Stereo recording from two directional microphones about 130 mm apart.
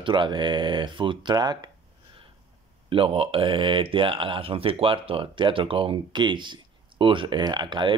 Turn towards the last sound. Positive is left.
turn(degrees=-35)  # may be behind; listen again after turning